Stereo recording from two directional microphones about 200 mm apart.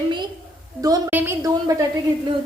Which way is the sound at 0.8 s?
15° right (ahead or behind).